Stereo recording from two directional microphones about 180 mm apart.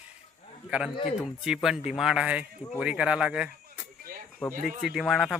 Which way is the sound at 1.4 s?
Centre (ahead or behind).